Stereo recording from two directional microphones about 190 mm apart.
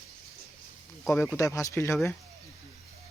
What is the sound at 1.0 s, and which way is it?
Speech, 15° left (ahead or behind).